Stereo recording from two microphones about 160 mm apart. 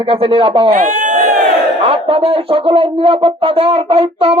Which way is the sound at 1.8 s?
35° right (ahead or behind).